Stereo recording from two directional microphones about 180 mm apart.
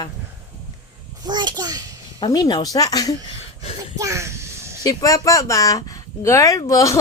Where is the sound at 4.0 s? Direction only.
15° right (ahead or behind).